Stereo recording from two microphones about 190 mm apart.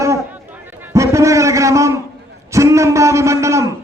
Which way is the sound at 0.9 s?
15° right (ahead or behind).